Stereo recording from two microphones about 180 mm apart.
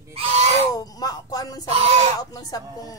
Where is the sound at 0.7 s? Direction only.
20° left (ahead or behind).